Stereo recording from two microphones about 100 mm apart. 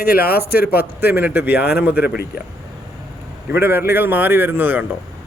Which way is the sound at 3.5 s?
20° right (ahead or behind).